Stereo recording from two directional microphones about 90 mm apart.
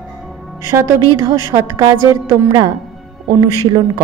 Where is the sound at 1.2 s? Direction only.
45° right (ahead or behind).